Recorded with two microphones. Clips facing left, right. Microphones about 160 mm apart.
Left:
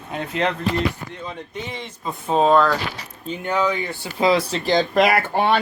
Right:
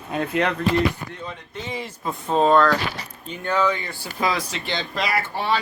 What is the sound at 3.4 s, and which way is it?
Speech, 15° left (ahead or behind).